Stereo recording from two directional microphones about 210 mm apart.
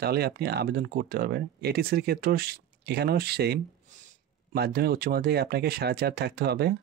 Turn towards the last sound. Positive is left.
turn(degrees=-50)  # may be behind; listen again after turning